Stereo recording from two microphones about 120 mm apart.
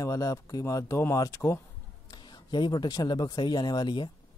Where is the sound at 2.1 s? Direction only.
35° left (ahead or behind).